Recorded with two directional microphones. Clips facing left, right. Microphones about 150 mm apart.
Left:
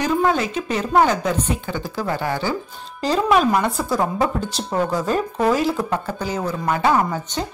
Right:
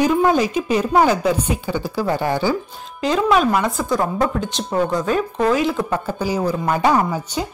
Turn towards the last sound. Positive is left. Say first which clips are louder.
# right 1 dB
turn(degrees=-10)  # may be behind; listen again after turning